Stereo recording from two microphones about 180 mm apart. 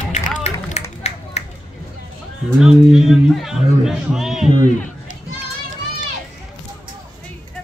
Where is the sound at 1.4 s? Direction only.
35° left (ahead or behind).